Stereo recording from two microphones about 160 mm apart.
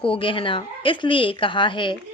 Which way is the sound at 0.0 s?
35° left (ahead or behind).